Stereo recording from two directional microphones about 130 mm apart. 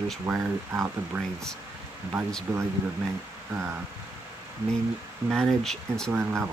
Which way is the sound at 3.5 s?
20° right (ahead or behind).